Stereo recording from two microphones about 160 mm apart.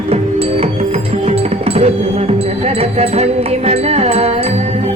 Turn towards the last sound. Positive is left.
turn(degrees=-40)  # may be behind; listen again after turning